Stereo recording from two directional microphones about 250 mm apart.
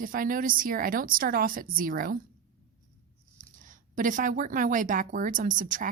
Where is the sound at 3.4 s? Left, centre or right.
Right.